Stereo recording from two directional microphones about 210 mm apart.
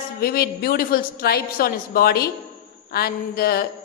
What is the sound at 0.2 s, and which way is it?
A woman's voice, 45° left (ahead or behind).